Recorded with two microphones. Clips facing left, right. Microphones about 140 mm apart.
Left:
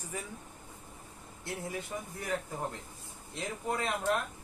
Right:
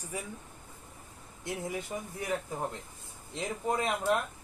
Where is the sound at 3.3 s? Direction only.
15° right (ahead or behind).